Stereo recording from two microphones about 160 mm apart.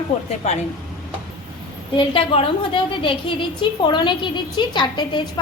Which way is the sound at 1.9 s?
35° left (ahead or behind).